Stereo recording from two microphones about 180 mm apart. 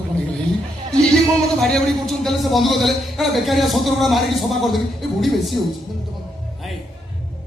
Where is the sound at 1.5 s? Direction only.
Centre (ahead or behind).